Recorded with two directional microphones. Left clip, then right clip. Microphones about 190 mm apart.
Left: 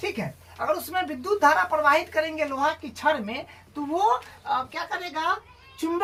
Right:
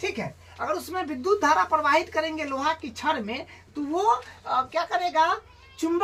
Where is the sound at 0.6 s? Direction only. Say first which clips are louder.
Left 3 dB; 15° left (ahead or behind).